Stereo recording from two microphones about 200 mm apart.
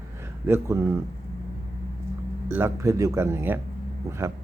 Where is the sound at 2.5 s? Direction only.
10° right (ahead or behind).